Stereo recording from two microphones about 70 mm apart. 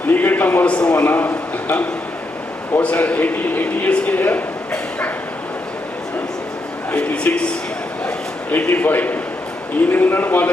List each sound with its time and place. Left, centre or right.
0.1 s a man's voice: left
2.8 s a man's voice: centre
6.9 s a man's voice: centre